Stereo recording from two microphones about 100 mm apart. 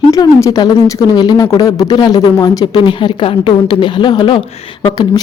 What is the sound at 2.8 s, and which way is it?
A woman's voice, 55° left (ahead or behind).